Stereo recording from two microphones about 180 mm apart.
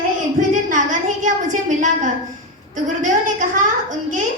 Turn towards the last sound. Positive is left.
turn(degrees=-45)  # may be behind; listen again after turning